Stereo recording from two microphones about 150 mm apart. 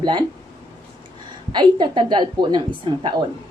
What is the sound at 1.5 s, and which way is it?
Speech, 30° right (ahead or behind).